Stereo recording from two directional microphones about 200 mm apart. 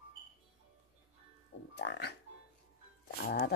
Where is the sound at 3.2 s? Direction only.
55° left (ahead or behind).